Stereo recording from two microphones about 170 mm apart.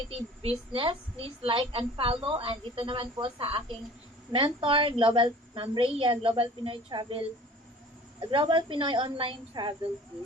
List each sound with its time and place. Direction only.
0.1 s a woman's voice: 35° right (ahead or behind)